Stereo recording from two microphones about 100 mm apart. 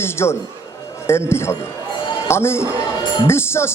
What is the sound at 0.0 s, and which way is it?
A man's voice, 25° left (ahead or behind).